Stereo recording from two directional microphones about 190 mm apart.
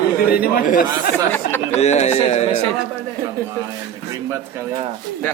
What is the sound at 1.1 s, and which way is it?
Speech, 10° left (ahead or behind).